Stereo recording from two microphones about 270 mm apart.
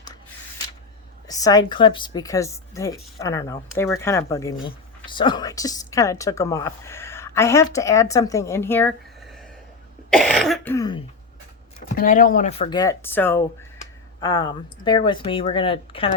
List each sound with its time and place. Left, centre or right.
1.3 s speech: centre
10.1 s throat clearing: centre
11.9 s speech: left